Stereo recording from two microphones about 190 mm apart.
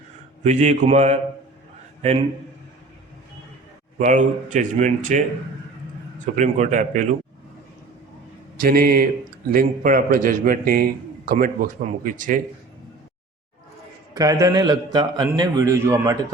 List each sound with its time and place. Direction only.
0.4 s speech: 40° right (ahead or behind)
3.9 s speech: 40° right (ahead or behind)
8.6 s a man's voice: 50° right (ahead or behind)
14.1 s a man's voice: 20° right (ahead or behind)